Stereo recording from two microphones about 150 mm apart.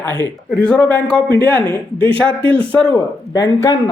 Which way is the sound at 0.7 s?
10° left (ahead or behind).